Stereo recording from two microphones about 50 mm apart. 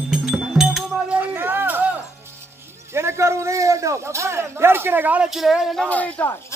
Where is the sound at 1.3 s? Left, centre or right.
Right.